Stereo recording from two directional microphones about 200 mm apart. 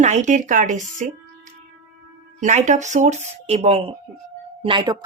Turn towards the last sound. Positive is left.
turn(degrees=-25)  # may be behind; listen again after turning